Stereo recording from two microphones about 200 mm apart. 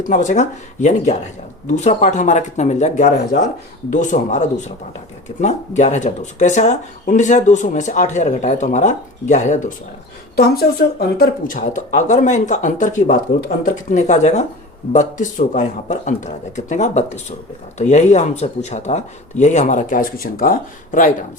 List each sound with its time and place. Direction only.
0.0 s speech: 40° left (ahead or behind)
10.3 s speech: 50° left (ahead or behind)